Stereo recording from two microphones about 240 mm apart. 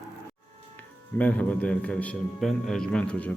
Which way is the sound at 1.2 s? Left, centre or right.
Centre.